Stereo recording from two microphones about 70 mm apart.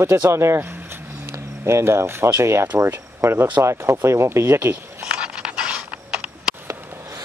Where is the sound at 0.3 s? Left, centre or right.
Right.